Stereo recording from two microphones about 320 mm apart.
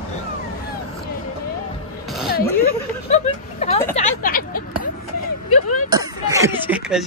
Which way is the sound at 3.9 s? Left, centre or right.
Left.